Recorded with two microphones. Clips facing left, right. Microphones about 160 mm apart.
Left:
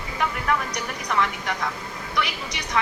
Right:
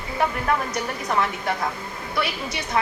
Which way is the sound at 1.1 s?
30° right (ahead or behind).